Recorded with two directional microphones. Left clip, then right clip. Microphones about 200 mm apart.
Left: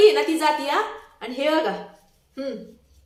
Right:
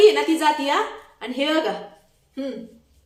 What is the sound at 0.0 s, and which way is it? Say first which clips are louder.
A woman's voice: right 1 dB; centre (ahead or behind).